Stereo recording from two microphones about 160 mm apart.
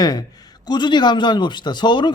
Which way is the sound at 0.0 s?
25° left (ahead or behind).